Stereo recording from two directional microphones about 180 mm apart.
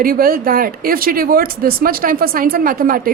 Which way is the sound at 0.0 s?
55° right (ahead or behind).